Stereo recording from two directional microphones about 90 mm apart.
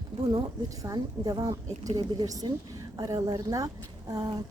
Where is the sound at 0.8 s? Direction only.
50° right (ahead or behind).